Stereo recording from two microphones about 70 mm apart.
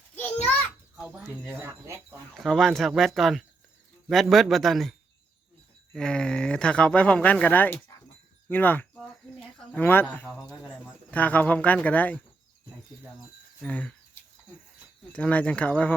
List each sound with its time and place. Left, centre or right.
2.3 s speech: centre; by 12.2 s left
13.7 s speech: centre
15.1 s speech: centre